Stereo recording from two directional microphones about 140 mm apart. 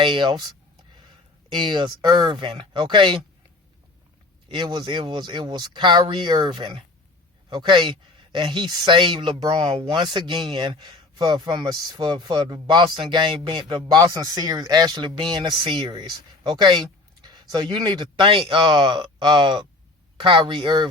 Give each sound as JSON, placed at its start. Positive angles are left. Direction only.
{"t": 0.0, "sound": "speech", "side_deg": -35}
{"t": 4.4, "sound": "speech", "side_deg": -35}